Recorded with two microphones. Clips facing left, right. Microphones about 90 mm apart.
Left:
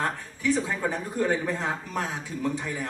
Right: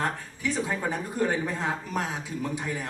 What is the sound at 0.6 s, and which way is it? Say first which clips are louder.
A man's voice: even; 15° right (ahead or behind).